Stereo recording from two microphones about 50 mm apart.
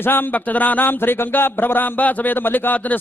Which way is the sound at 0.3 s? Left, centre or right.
Left.